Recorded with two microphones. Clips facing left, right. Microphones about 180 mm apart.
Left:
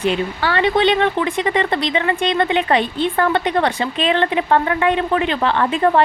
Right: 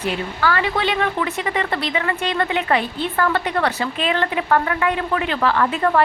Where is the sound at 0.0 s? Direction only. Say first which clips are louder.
Left 3 dB; 25° left (ahead or behind).